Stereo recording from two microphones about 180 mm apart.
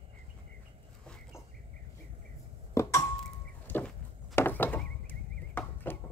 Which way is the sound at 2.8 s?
15° left (ahead or behind).